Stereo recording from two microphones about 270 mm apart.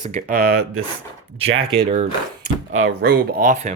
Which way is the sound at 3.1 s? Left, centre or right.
Right.